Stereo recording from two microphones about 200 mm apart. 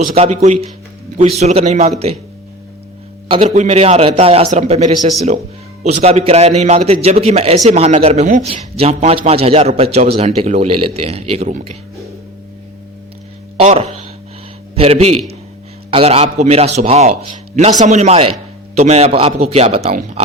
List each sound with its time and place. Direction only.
0.2 s a man's voice: 35° right (ahead or behind)
3.2 s a man's voice: 30° right (ahead or behind)
13.6 s a man's voice: 30° right (ahead or behind)
19.9 s a man's voice: 40° right (ahead or behind)